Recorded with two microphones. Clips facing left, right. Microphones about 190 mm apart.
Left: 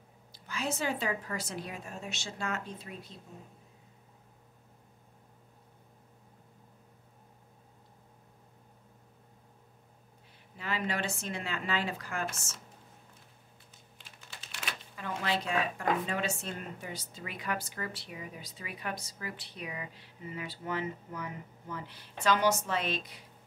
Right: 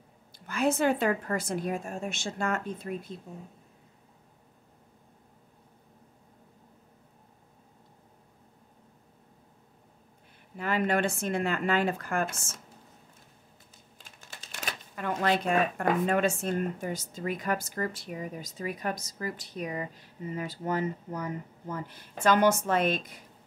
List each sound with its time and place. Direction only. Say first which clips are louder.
0.3 s speech: right 9 dB; 55° right (ahead or behind)
10.6 s speech: right 7 dB; 50° right (ahead or behind)
13.9 s typing: right 2 dB; 45° right (ahead or behind)
15.0 s speech: right 6 dB; 55° right (ahead or behind)